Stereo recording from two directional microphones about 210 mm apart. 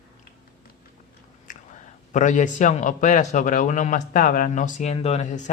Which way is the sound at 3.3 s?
35° left (ahead or behind).